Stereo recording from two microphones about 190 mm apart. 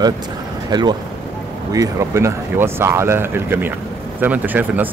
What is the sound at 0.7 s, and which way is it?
Speech, 20° right (ahead or behind).